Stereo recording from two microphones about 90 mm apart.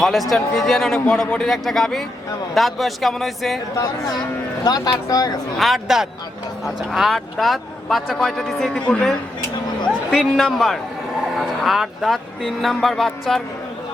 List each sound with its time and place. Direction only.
0.0 s a man's voice: centre (ahead or behind)
4.6 s speech: 45° left (ahead or behind)
5.5 s a man's voice: centre (ahead or behind)
10.2 s a man's voice: centre (ahead or behind)